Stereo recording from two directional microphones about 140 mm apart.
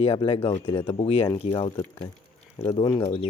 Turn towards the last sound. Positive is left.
turn(degrees=45)  # may be behind; listen again after turning